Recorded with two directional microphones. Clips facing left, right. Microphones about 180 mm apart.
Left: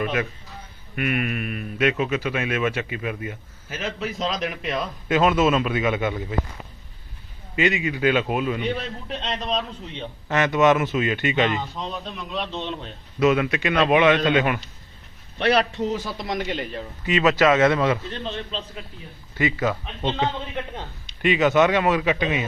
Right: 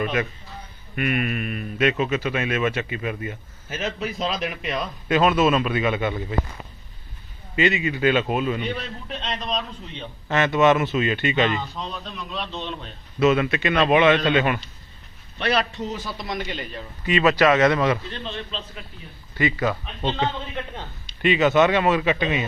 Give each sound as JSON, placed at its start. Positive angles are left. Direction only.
{"t": 0.0, "sound": "a man's voice", "side_deg": 5}
{"t": 3.7, "sound": "a man's voice", "side_deg": -25}
{"t": 4.2, "sound": "speech", "side_deg": -5}
{"t": 5.0, "sound": "a man's voice", "side_deg": 20}
{"t": 7.5, "sound": "a man's voice", "side_deg": 10}
{"t": 8.7, "sound": "a man's voice", "side_deg": 25}
{"t": 10.2, "sound": "a man's voice", "side_deg": 10}
{"t": 16.2, "sound": "a man's voice", "side_deg": 90}
{"t": 17.1, "sound": "a man's voice", "side_deg": 15}
{"t": 18.1, "sound": "a man's voice", "side_deg": 40}
{"t": 19.4, "sound": "a man's voice", "side_deg": 20}